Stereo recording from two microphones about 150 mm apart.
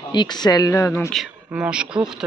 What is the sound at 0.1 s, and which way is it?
Speech, 30° left (ahead or behind).